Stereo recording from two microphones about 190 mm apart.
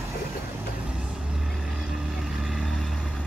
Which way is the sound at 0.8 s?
5° right (ahead or behind).